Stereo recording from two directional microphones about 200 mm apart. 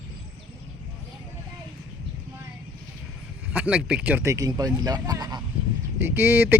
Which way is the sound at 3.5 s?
5° right (ahead or behind).